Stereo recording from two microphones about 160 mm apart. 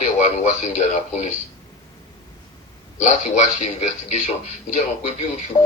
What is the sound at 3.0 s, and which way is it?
Speech, 50° left (ahead or behind).